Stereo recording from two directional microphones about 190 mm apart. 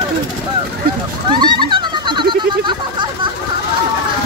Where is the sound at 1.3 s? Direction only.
25° right (ahead or behind).